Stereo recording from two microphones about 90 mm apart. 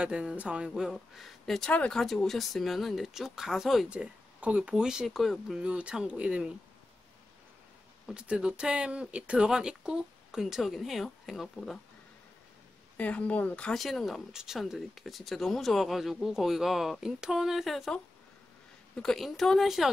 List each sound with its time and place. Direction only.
0.0 s speech: 10° right (ahead or behind)
3.9 s speech: 15° right (ahead or behind)
5.6 s speech: 15° right (ahead or behind)
8.1 s speech: 10° right (ahead or behind)
12.9 s speech: 15° left (ahead or behind)
13.7 s speech: centre (ahead or behind)